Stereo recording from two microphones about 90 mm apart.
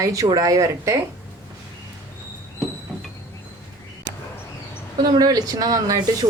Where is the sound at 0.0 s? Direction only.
40° right (ahead or behind).